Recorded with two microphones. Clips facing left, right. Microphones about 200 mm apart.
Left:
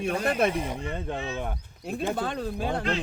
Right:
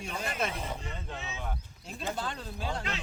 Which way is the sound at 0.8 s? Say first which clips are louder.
Left 9 dB; 60° left (ahead or behind).